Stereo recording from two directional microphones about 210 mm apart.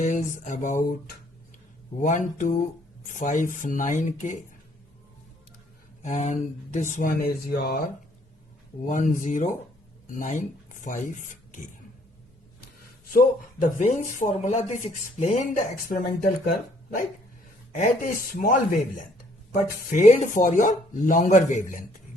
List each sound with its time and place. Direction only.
0.0 s speech: 35° left (ahead or behind)
2.0 s speech: 35° left (ahead or behind)
6.0 s speech: 35° left (ahead or behind)
8.9 s speech: 35° left (ahead or behind)
13.1 s speech: 35° left (ahead or behind)
17.7 s speech: 35° left (ahead or behind)
19.9 s speech: 35° left (ahead or behind)